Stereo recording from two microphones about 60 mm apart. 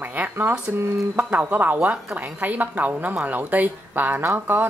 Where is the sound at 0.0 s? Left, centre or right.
Right.